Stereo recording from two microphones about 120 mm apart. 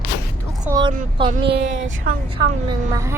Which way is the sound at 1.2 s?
45° right (ahead or behind).